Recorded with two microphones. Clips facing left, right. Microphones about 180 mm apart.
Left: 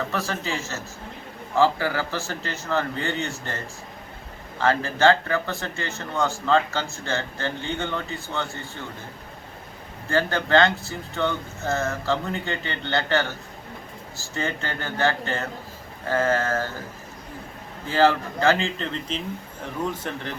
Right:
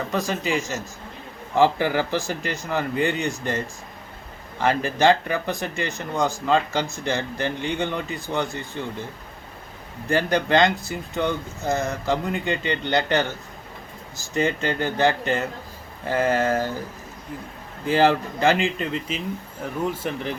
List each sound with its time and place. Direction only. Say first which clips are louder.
0.1 s speech: right 4 dB; 15° right (ahead or behind)
10.1 s speech: right 1 dB; 15° right (ahead or behind)
17.8 s speech: right 1 dB; 15° right (ahead or behind)